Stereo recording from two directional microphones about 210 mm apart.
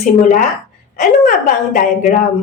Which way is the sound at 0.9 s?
40° left (ahead or behind).